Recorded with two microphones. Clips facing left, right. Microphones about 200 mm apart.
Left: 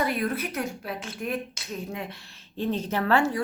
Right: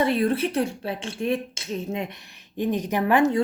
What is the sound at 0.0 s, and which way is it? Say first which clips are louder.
A woman's voice: right 6 dB; 30° right (ahead or behind).